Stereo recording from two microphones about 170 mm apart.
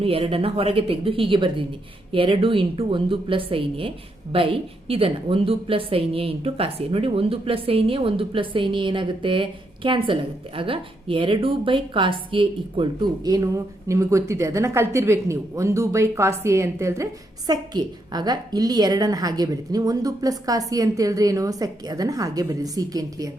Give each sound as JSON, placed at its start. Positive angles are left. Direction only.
{"t": 0.0, "sound": "a woman's voice", "side_deg": -35}